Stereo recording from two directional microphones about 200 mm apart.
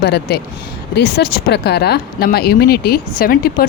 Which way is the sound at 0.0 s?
55° left (ahead or behind).